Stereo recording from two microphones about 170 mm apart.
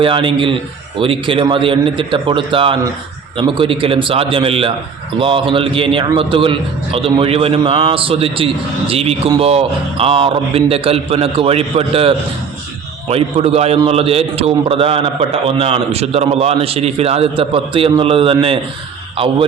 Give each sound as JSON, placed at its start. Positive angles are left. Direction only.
{"t": 0.0, "sound": "a man's voice", "side_deg": -30}